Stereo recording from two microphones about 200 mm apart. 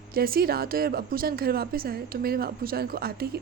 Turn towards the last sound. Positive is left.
turn(degrees=-50)  # may be behind; listen again after turning